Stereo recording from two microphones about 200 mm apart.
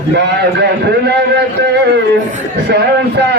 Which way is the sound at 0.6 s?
55° right (ahead or behind).